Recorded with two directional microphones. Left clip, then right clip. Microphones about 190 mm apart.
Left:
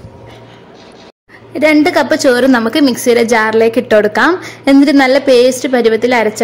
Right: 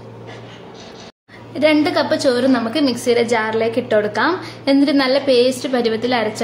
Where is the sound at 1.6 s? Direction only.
40° left (ahead or behind).